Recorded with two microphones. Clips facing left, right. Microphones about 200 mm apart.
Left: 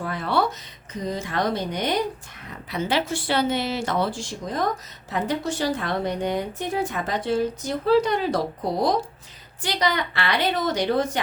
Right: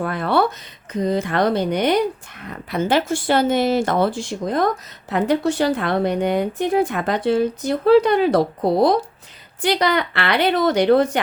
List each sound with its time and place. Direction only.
0.0 s a woman's voice: 60° right (ahead or behind)
9.6 s speech: 65° right (ahead or behind)